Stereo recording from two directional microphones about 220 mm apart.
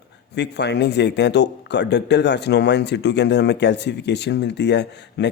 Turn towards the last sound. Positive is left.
turn(degrees=50)  # may be behind; listen again after turning